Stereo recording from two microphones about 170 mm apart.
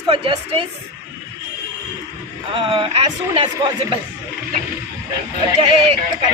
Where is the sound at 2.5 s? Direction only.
30° right (ahead or behind).